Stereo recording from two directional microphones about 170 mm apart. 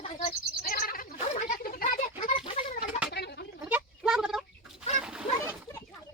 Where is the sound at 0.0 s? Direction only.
40° left (ahead or behind).